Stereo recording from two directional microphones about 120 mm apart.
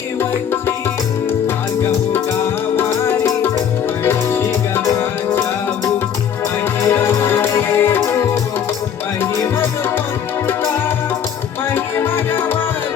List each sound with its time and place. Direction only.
2.7 s music: 20° left (ahead or behind)
10.4 s music: 20° left (ahead or behind)